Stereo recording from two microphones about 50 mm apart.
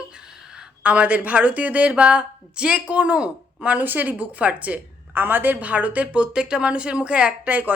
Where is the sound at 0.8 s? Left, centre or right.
Right.